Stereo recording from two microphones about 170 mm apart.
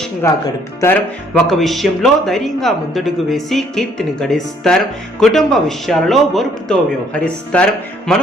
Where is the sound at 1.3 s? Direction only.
Centre (ahead or behind).